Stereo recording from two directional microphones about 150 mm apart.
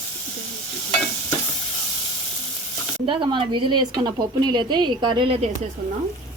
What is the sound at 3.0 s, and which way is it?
Speech, 35° right (ahead or behind).